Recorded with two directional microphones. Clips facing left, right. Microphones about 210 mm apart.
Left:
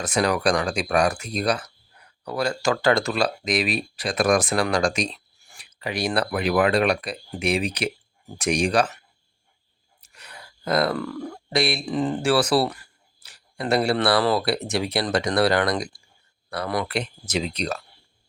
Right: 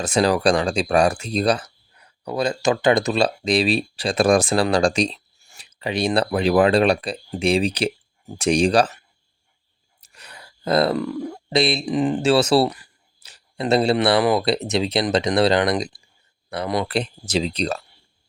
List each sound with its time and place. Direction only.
0.0 s speech: 30° right (ahead or behind)
10.0 s speech: 30° right (ahead or behind)